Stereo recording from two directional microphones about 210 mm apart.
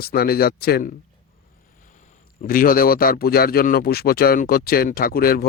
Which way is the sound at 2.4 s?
40° left (ahead or behind).